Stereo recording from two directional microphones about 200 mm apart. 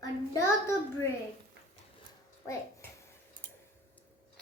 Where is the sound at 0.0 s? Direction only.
15° left (ahead or behind).